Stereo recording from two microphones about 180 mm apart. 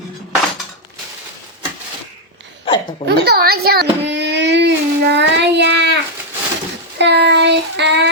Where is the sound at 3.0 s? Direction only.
60° right (ahead or behind).